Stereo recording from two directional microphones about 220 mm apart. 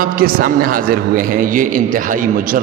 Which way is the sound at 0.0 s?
40° right (ahead or behind).